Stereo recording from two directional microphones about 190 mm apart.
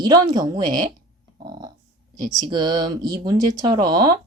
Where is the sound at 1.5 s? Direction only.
20° right (ahead or behind).